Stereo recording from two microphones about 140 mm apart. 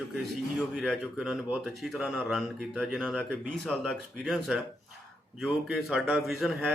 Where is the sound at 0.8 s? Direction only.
5° right (ahead or behind).